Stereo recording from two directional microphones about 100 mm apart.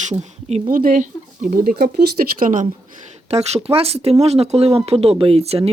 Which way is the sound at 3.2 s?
90° right.